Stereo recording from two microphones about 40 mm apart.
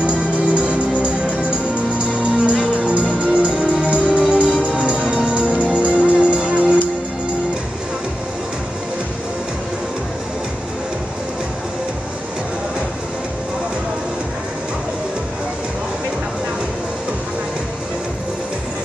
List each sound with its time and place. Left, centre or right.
0.0 s music: right